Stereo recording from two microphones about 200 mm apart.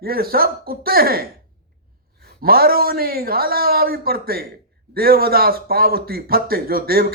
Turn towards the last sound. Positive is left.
turn(degrees=-50)  # may be behind; listen again after turning